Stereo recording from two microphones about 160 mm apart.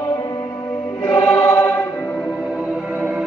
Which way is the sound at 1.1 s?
20° left (ahead or behind).